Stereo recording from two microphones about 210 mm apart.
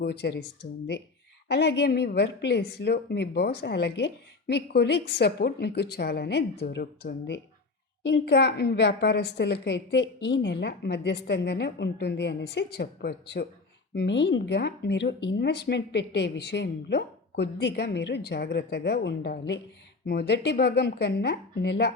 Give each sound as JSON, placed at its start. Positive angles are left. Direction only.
{"t": 0.0, "sound": "speech", "side_deg": 50}
{"t": 1.5, "sound": "speech", "side_deg": 55}